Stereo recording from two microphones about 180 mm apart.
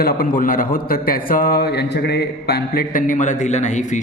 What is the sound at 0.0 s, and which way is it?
A man's voice, 55° left (ahead or behind).